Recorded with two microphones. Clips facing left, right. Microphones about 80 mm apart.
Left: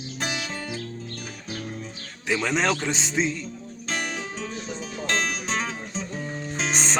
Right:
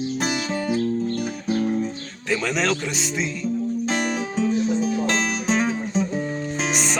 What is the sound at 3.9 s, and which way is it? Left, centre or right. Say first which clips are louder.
Music: right 6 dB; centre.